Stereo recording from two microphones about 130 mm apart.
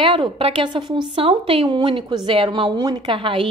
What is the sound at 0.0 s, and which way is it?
A woman's voice, 40° right (ahead or behind).